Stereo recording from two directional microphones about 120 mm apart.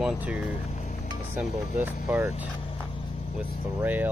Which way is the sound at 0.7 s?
75° left (ahead or behind).